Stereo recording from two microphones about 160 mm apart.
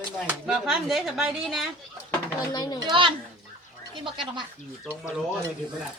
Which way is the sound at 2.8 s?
30° right (ahead or behind).